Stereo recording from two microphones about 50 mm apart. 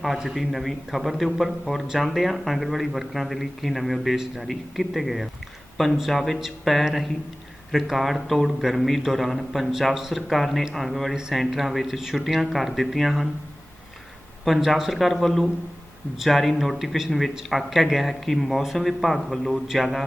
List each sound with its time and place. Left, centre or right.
0.2 s speech: centre
11.1 s a man's voice: centre
11.3 s a man's voice: centre
14.4 s speech: centre